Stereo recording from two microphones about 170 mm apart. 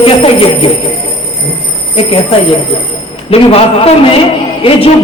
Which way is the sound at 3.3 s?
35° left (ahead or behind).